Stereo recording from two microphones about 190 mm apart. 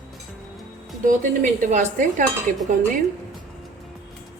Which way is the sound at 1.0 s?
45° right (ahead or behind).